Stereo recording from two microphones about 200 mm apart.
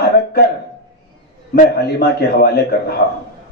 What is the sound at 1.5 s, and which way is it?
A man's voice, 50° left (ahead or behind).